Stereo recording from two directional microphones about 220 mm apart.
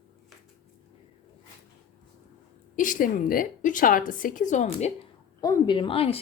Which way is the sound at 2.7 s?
35° left (ahead or behind).